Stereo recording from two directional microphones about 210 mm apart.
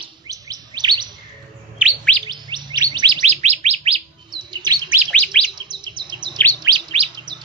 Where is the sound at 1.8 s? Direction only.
5° right (ahead or behind).